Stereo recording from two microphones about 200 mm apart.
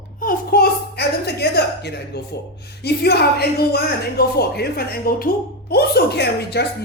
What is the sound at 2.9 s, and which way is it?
A man's voice, 55° left (ahead or behind).